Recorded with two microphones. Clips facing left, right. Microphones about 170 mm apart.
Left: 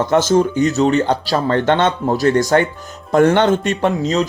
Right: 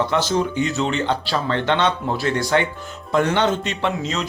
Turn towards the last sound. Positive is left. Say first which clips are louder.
# left 7 dB
turn(degrees=40)  # may be behind; listen again after turning